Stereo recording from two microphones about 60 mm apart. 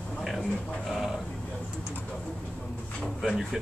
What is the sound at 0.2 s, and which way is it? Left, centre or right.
Music, centre.